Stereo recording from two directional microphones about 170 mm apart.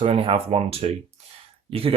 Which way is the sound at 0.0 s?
35° right (ahead or behind).